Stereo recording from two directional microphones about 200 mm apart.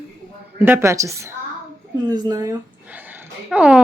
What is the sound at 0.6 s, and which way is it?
Speech, 15° right (ahead or behind).